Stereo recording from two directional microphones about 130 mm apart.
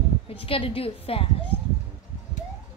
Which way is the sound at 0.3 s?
45° left (ahead or behind).